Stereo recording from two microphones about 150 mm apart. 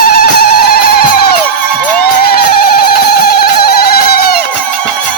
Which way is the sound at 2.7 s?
85° left.